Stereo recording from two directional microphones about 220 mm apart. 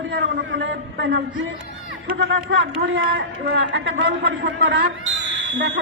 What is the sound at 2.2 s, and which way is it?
Speech, 60° right (ahead or behind).